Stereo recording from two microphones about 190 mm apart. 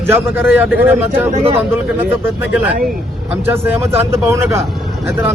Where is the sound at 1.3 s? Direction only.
30° right (ahead or behind).